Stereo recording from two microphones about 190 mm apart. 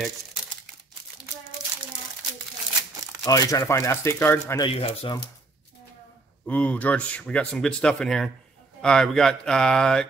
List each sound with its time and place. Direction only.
3.3 s speech: 20° left (ahead or behind)
4.6 s speech: 25° left (ahead or behind)
6.4 s speech: 5° left (ahead or behind)